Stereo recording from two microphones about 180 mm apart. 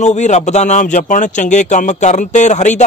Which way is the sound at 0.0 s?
40° left (ahead or behind).